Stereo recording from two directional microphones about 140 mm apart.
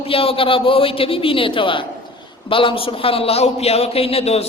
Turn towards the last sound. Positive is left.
turn(degrees=45)  # may be behind; listen again after turning